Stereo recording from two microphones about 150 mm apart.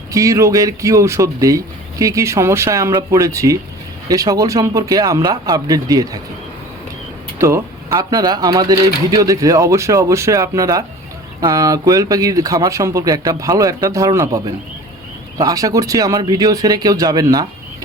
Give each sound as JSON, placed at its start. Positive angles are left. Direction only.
{"t": 0.1, "sound": "speech", "side_deg": -20}
{"t": 7.3, "sound": "speech", "side_deg": -20}